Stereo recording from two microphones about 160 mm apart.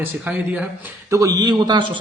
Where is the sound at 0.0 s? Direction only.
10° right (ahead or behind).